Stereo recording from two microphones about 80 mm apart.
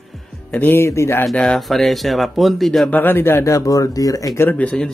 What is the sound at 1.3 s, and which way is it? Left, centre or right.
Speech, centre.